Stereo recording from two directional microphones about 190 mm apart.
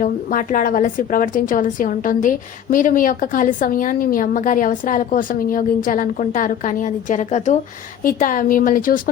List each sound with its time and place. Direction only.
0.0 s a woman's voice: 45° left (ahead or behind)